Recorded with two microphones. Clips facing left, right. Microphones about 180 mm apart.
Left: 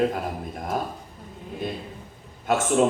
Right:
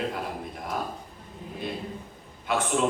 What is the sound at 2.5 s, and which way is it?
Speech, 45° left (ahead or behind).